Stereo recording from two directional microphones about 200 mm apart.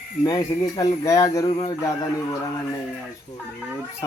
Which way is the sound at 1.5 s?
30° left (ahead or behind).